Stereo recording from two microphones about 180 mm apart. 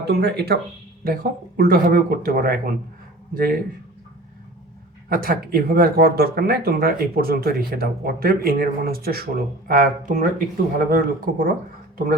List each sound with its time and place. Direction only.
0.0 s speech: 65° right (ahead or behind)
5.0 s speech: 55° right (ahead or behind)